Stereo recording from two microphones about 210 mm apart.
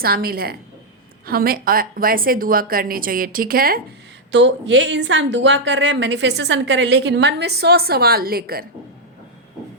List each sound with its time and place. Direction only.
0.0 s speech: 45° right (ahead or behind)
4.3 s a woman's voice: 60° right (ahead or behind)